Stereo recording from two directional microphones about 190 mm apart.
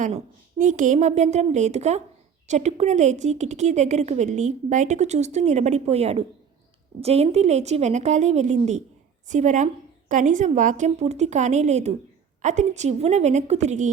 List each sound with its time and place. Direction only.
0.6 s a woman's voice: 45° right (ahead or behind)